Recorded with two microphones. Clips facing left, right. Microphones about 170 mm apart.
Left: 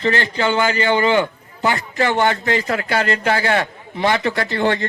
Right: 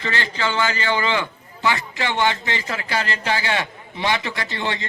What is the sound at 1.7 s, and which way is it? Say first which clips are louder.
A man's voice: left 6 dB; 45° left (ahead or behind).